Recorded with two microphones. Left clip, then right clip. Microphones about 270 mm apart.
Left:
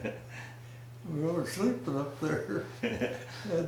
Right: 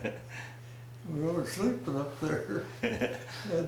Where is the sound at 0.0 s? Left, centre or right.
Centre.